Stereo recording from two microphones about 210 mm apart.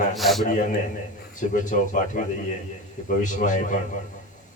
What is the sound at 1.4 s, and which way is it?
Speech, 40° left (ahead or behind).